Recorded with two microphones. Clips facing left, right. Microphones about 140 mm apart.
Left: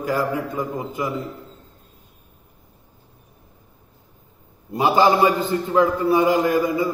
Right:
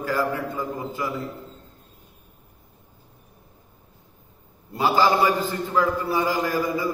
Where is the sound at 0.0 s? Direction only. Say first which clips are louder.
Left 2 dB; 15° left (ahead or behind).